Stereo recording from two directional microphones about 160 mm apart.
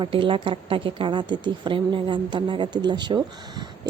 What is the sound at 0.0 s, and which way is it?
Speech, 30° right (ahead or behind).